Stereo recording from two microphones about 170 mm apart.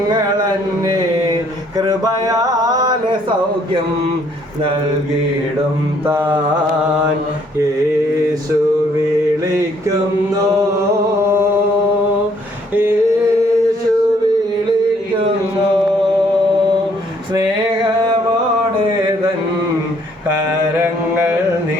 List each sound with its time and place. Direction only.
1.7 s speech: 20° right (ahead or behind)
6.1 s mantra: 10° right (ahead or behind)
12.7 s a sound: 10° right (ahead or behind)